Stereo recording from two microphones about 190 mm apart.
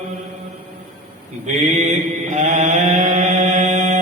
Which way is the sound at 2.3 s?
35° right (ahead or behind).